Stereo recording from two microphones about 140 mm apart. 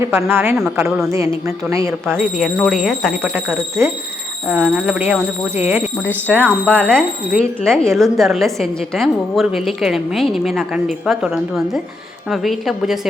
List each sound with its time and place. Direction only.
0.0 s speech: 20° right (ahead or behind)
2.4 s speech: centre (ahead or behind)
3.5 s speech: 15° right (ahead or behind)
6.1 s speech: 10° left (ahead or behind)